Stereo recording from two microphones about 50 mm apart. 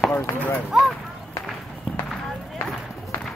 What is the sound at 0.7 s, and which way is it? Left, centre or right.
Speech, centre.